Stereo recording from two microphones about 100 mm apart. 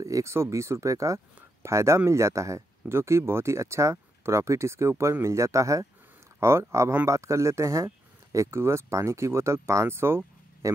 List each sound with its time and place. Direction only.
0.0 s speech: 30° right (ahead or behind)